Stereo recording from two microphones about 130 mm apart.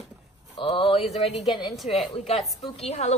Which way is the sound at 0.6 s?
50° left (ahead or behind).